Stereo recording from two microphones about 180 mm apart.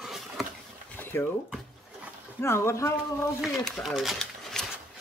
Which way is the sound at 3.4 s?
Centre (ahead or behind).